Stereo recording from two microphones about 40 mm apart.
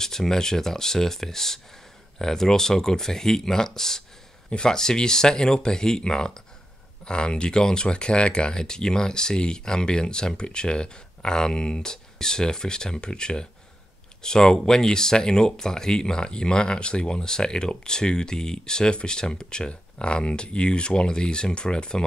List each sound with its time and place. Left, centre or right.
0.0 s speech: centre